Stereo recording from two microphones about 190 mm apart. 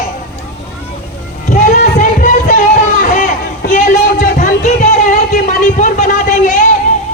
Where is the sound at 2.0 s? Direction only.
45° left (ahead or behind).